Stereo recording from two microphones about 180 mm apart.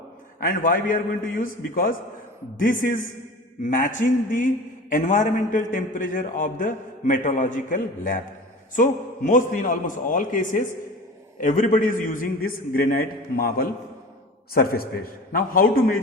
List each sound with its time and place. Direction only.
0.3 s a man's voice: 50° left (ahead or behind)